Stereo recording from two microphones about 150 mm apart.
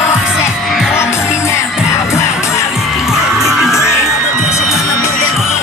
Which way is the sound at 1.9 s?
20° left (ahead or behind).